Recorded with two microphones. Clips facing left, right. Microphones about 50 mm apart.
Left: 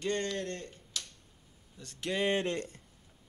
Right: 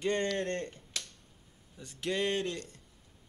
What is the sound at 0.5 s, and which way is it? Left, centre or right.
Finger snapping, right.